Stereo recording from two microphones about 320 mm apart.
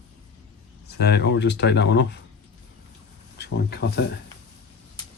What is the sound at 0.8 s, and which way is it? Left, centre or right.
Speech, left.